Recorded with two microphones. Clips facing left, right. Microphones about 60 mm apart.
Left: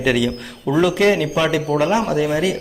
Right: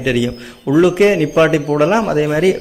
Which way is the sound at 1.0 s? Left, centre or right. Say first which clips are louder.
Right 5 dB; right.